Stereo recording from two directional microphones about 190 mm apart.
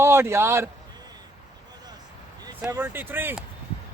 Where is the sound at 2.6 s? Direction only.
15° right (ahead or behind).